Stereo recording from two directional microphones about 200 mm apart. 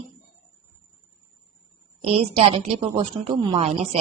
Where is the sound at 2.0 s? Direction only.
30° right (ahead or behind).